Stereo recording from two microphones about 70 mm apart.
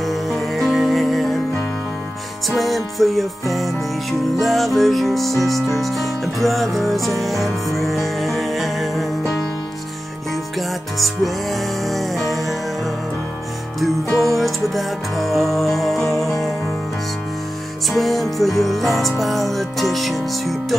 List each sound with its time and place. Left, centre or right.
0.0 s music: centre
2.4 s music: centre
11.8 s music: centre
14.1 s music: centre
17.8 s music: centre